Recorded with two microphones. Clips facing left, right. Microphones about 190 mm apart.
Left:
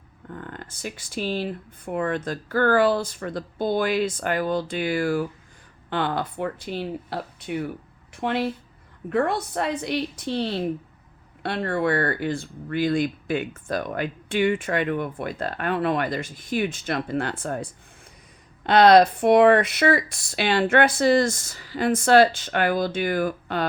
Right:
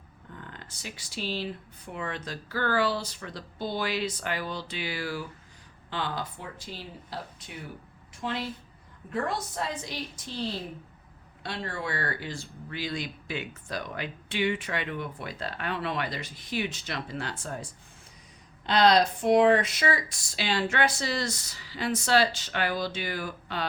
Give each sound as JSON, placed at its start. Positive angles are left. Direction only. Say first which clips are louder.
{"t": 0.3, "sound": "speech", "louder": "left 8 dB", "side_deg": 50}